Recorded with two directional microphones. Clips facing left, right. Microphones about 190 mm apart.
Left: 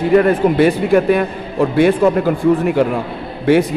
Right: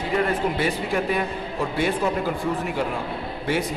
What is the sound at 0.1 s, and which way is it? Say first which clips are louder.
A man's voice: left 11 dB; 60° left (ahead or behind).